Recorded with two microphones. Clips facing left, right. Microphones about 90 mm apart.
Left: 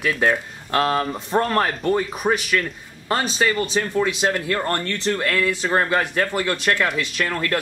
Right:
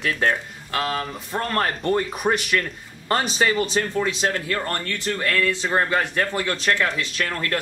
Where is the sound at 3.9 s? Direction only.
15° left (ahead or behind).